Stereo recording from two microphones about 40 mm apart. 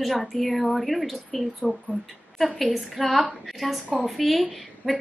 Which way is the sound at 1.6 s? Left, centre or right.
Left.